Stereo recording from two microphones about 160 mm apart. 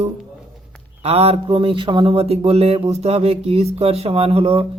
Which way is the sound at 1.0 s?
40° right (ahead or behind).